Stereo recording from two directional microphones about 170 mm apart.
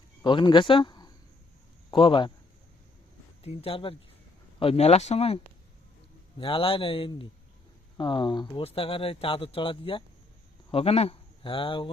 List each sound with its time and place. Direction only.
0.2 s a man's voice: 25° left (ahead or behind)
3.4 s speech: 35° left (ahead or behind)